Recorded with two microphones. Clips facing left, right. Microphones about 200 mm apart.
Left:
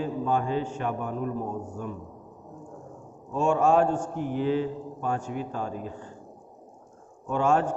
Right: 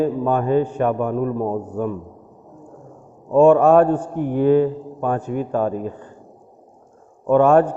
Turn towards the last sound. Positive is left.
turn(degrees=-60)  # may be behind; listen again after turning